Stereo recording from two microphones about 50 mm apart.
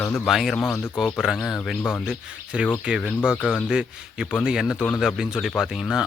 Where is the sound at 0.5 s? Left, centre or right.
Centre.